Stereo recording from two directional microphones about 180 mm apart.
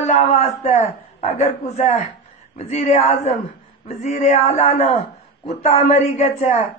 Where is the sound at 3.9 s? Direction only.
45° left (ahead or behind).